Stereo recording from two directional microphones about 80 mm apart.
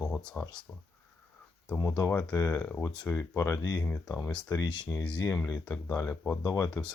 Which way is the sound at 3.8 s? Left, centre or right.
Centre.